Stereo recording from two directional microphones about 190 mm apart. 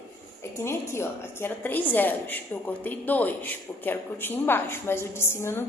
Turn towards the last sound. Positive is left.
turn(degrees=15)  # may be behind; listen again after turning